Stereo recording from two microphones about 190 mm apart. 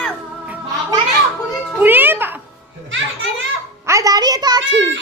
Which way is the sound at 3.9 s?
15° right (ahead or behind).